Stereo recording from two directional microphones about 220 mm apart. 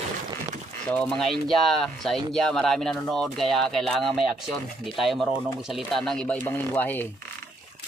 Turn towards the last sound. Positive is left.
turn(degrees=10)  # may be behind; listen again after turning